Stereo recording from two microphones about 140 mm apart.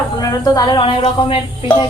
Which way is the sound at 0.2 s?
25° left (ahead or behind).